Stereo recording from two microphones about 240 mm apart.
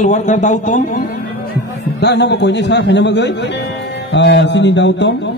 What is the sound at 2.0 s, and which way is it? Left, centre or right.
Music, left.